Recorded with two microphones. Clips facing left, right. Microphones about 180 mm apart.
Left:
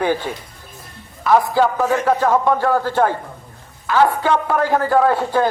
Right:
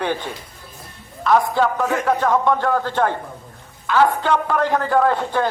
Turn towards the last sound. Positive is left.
turn(degrees=5)  # may be behind; listen again after turning